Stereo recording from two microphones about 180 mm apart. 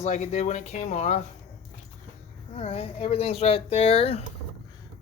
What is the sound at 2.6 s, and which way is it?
Speech, 35° left (ahead or behind).